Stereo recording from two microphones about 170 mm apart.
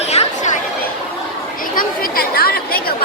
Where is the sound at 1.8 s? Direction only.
60° left (ahead or behind).